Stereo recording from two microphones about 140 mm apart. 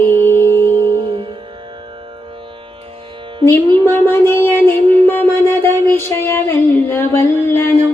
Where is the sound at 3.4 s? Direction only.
15° left (ahead or behind).